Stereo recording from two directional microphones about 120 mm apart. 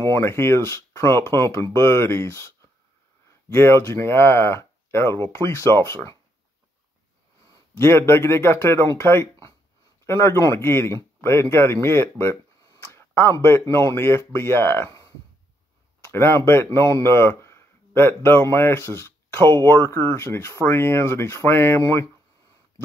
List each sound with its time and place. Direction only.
0.0 s speech: 20° left (ahead or behind)
7.7 s speech: 20° left (ahead or behind)